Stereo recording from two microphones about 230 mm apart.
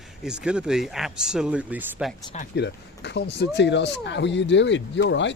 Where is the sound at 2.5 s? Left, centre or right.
Left.